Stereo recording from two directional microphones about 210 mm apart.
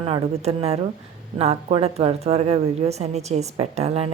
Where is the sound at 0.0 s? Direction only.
30° right (ahead or behind).